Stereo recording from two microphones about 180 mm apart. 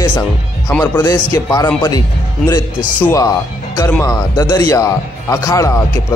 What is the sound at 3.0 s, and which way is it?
A man's voice, 15° left (ahead or behind).